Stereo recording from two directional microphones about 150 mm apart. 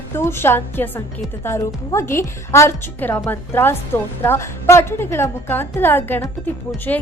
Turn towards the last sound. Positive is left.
turn(degrees=15)  # may be behind; listen again after turning